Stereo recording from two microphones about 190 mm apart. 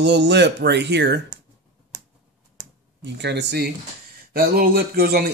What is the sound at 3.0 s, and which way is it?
Speech, 65° right (ahead or behind).